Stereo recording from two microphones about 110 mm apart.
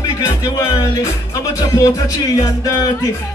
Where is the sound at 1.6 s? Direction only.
30° left (ahead or behind).